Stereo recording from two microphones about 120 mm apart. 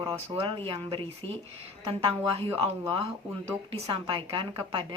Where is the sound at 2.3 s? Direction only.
50° right (ahead or behind).